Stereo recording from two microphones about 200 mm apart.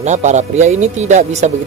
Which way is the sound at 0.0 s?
35° right (ahead or behind).